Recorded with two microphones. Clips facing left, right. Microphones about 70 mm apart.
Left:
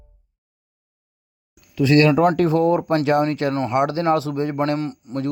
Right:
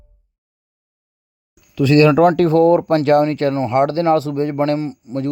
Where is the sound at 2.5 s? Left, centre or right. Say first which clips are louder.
Right 6 dB; right.